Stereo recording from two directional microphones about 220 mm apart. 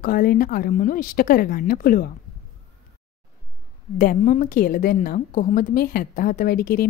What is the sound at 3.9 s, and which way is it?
A woman's voice, 35° left (ahead or behind).